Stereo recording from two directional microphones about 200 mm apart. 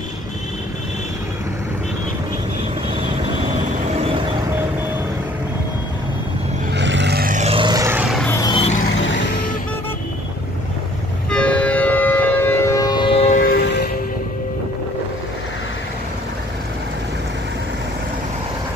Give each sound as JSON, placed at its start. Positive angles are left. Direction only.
{"t": 6.7, "sound": "vehicle", "side_deg": -60}
{"t": 8.2, "sound": "vehicle", "side_deg": 10}
{"t": 8.5, "sound": "vehicle", "side_deg": 25}
{"t": 11.2, "sound": "civil defense siren", "side_deg": 5}